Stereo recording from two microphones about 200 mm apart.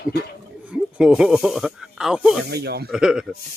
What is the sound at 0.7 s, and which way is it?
Speech, 5° right (ahead or behind).